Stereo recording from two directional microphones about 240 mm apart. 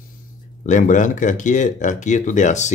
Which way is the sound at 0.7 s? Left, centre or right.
Left.